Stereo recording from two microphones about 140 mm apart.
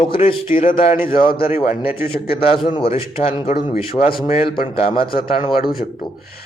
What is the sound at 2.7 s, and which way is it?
A man's voice, 40° left (ahead or behind).